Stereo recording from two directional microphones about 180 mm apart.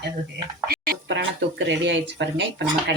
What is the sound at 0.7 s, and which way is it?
Speech, 75° right (ahead or behind).